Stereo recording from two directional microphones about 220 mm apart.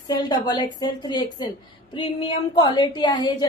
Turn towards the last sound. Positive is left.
turn(degrees=20)  # may be behind; listen again after turning